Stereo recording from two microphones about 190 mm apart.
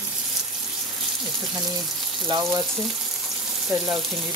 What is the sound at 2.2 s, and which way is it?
Frying, 20° right (ahead or behind).